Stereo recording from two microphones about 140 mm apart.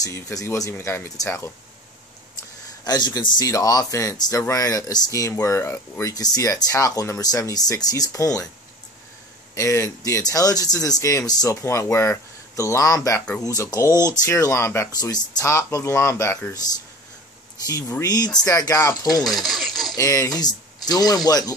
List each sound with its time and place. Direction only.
0.0 s speech: 25° left (ahead or behind)
2.8 s speech: 30° left (ahead or behind)
9.6 s speech: 20° left (ahead or behind)
17.6 s speech: 25° left (ahead or behind)
19.4 s a sound: centre (ahead or behind)
20.0 s speech: 25° left (ahead or behind)